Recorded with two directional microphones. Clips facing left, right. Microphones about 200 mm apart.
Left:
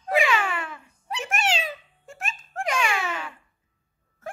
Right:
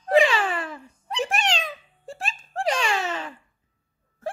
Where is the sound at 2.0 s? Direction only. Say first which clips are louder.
Right 4 dB; 35° right (ahead or behind).